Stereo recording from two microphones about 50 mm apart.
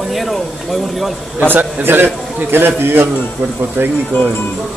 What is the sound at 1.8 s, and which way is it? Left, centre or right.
A man's voice, right.